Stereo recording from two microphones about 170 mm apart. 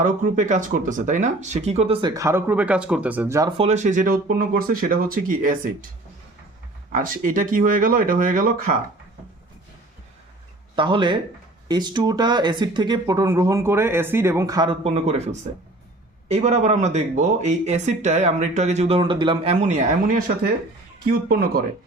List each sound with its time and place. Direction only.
0.0 s speech: 45° right (ahead or behind); by 3.5 s 15° right (ahead or behind)
3.6 s speech: 45° right (ahead or behind)
6.9 s speech: 50° right (ahead or behind)
10.8 s speech: 30° right (ahead or behind)
19.5 s speech: 45° right (ahead or behind); by 21.6 s 60° right (ahead or behind)